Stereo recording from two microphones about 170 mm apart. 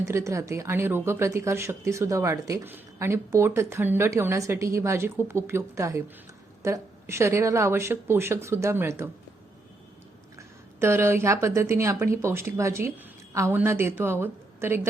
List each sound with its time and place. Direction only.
0.1 s speech: 15° right (ahead or behind)
10.3 s speech: 15° right (ahead or behind)